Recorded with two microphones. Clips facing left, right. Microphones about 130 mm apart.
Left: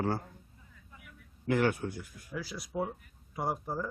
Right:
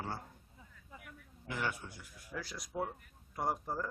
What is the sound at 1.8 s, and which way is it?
Speech, centre (ahead or behind).